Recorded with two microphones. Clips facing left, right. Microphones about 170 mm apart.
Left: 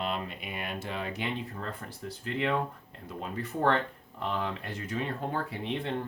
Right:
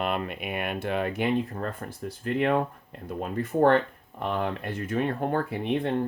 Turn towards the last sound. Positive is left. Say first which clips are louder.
# right 6 dB
turn(degrees=-55)  # may be behind; listen again after turning